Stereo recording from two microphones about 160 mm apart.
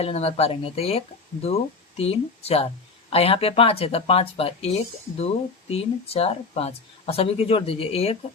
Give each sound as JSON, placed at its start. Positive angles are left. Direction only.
{"t": 0.0, "sound": "speech", "side_deg": 40}